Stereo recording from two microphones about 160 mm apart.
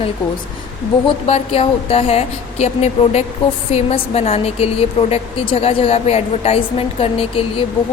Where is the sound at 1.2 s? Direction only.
40° left (ahead or behind).